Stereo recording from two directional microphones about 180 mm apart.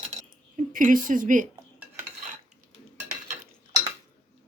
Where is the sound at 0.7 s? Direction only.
50° right (ahead or behind).